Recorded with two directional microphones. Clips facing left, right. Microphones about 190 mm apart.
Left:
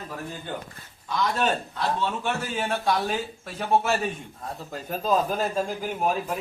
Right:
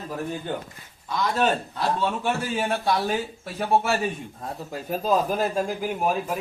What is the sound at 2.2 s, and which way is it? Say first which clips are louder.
Speech: right 3 dB; 10° right (ahead or behind).